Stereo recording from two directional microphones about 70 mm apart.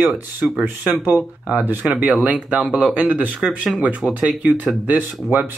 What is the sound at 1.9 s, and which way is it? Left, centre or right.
Speech, centre.